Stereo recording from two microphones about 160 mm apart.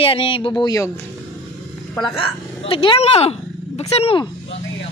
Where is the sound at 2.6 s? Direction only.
35° left (ahead or behind).